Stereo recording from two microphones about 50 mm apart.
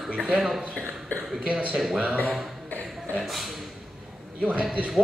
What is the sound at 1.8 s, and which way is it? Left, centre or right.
Speech, centre.